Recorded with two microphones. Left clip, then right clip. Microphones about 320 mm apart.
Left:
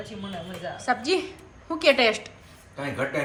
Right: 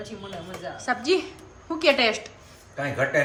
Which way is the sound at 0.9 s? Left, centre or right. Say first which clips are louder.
Right 1 dB; centre.